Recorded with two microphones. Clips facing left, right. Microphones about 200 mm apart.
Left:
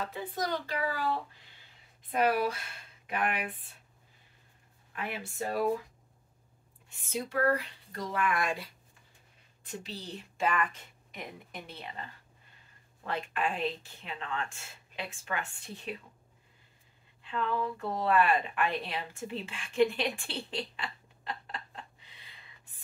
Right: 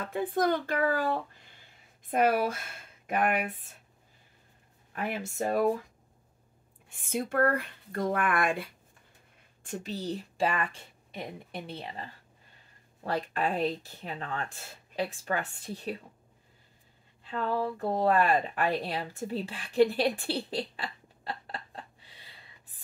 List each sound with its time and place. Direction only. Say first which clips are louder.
0.0 s speech: right 7 dB; 55° right (ahead or behind)
4.9 s speech: right 4 dB; 45° right (ahead or behind)
6.9 s a woman's voice: right 4 dB; 55° right (ahead or behind)
17.2 s speech: right 2 dB; 40° right (ahead or behind)